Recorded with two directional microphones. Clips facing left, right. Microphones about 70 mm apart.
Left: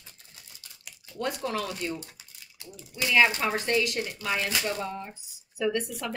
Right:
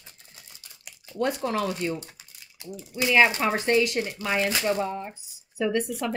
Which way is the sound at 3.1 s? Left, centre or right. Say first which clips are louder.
Right 3 dB; right.